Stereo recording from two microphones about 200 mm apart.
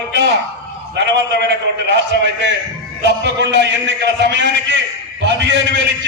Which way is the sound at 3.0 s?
60° right (ahead or behind).